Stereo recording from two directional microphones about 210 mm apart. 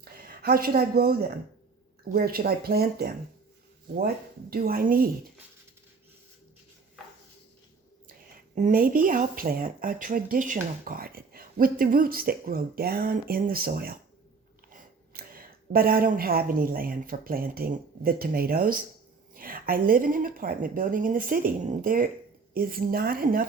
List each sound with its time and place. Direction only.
0.0 s speech: 45° right (ahead or behind)
8.5 s a woman's voice: 40° right (ahead or behind)